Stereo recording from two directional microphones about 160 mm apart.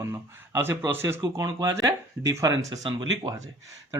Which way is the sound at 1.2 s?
25° right (ahead or behind).